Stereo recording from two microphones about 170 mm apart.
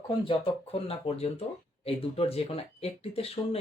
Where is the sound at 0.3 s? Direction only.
35° left (ahead or behind).